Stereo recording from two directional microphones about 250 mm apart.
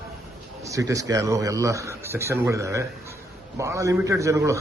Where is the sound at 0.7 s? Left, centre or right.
Centre.